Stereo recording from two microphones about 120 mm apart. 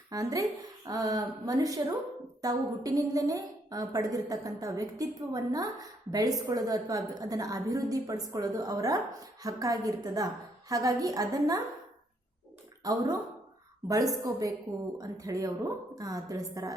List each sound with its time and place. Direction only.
0.1 s a woman's voice: 30° right (ahead or behind)
12.8 s a woman's voice: 30° right (ahead or behind)